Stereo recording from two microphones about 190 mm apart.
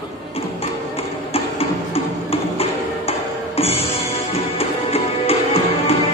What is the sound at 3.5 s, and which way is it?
Music, 30° left (ahead or behind).